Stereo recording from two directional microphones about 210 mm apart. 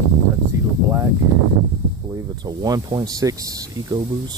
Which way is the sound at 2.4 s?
20° right (ahead or behind).